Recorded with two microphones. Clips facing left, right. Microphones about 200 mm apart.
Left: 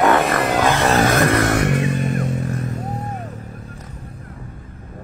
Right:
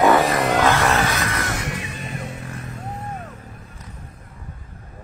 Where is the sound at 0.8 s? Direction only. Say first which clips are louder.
Left 6 dB; 45° left (ahead or behind).